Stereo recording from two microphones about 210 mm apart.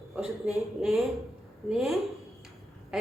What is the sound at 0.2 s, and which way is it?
A woman's voice, 5° right (ahead or behind).